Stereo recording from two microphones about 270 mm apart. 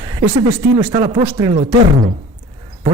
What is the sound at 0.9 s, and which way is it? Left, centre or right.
Speech, centre.